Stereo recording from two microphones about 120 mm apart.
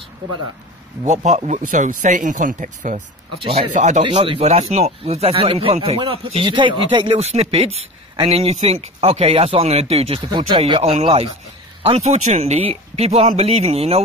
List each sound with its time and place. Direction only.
1.0 s speech: 75° right (ahead or behind)
3.4 s speech: 70° right (ahead or behind)
4.2 s speech: 55° right (ahead or behind)
7.2 s speech: 60° right (ahead or behind)